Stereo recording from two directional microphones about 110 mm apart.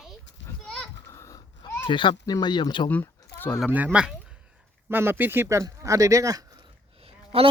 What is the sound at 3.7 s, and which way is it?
Speech, 15° right (ahead or behind).